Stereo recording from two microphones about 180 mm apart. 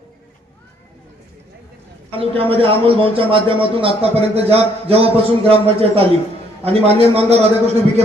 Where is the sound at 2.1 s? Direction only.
30° right (ahead or behind).